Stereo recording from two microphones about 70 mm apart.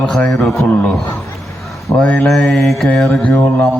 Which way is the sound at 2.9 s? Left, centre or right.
Centre.